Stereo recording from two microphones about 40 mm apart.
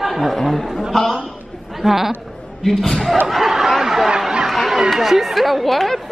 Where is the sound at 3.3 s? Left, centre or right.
Centre.